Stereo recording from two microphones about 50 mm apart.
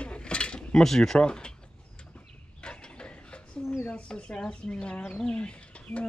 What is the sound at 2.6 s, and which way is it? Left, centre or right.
Mechanisms, centre.